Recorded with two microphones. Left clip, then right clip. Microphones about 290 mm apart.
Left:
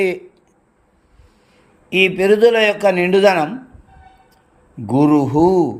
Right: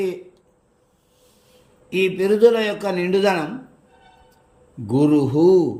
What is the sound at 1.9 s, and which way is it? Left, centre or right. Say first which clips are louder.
A man's voice: left 6 dB; centre.